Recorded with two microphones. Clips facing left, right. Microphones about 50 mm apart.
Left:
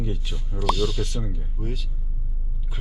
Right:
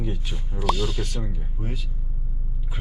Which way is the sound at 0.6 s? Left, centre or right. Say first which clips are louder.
Left 1 dB; centre.